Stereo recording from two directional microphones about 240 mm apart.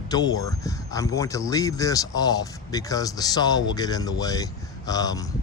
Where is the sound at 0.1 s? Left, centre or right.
Centre.